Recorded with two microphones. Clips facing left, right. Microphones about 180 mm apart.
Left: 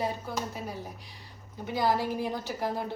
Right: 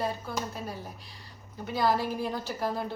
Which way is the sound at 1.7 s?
15° left (ahead or behind).